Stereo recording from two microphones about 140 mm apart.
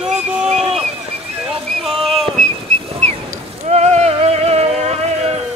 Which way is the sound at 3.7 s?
55° right (ahead or behind).